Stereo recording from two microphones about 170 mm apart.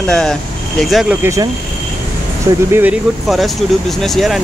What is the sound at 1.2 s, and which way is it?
Speech, 15° right (ahead or behind).